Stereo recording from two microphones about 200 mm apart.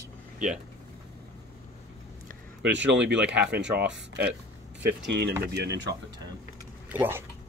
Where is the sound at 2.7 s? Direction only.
65° right (ahead or behind).